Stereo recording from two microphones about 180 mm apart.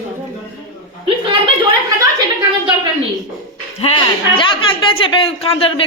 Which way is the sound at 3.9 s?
35° left (ahead or behind).